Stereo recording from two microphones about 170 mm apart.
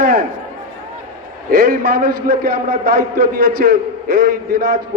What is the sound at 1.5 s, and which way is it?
A man's voice, 60° right (ahead or behind).